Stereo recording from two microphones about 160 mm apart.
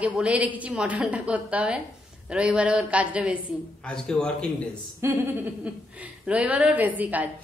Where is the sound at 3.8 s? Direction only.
5° left (ahead or behind).